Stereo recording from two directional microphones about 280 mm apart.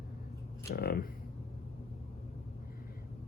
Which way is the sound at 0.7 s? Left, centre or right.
Left.